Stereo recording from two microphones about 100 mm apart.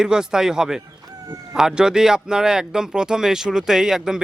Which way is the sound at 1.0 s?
40° right (ahead or behind).